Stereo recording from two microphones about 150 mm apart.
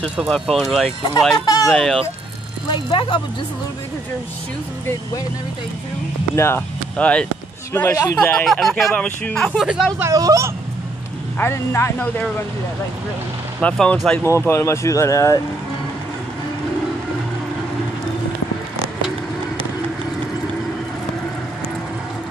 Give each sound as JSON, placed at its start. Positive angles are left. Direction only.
{"t": 0.2, "sound": "speech", "side_deg": 0}
{"t": 1.4, "sound": "speech", "side_deg": 25}
{"t": 1.7, "sound": "speech", "side_deg": 0}
{"t": 2.7, "sound": "speech", "side_deg": 35}
{"t": 6.3, "sound": "speech", "side_deg": 15}
{"t": 7.7, "sound": "speech", "side_deg": 20}
{"t": 8.2, "sound": "speech", "side_deg": 5}
{"t": 9.9, "sound": "speech", "side_deg": -20}
{"t": 11.3, "sound": "speech", "side_deg": 15}
{"t": 13.6, "sound": "speech", "side_deg": 10}
{"t": 14.2, "sound": "speech", "side_deg": 15}